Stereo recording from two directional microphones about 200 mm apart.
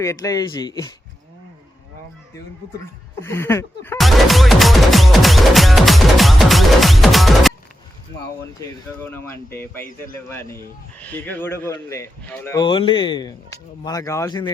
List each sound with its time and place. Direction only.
0.0 s speech: 15° left (ahead or behind)
3.2 s speech: 15° left (ahead or behind)
3.9 s music: centre (ahead or behind)
8.6 s speech: 10° left (ahead or behind)
12.6 s speech: 25° left (ahead or behind)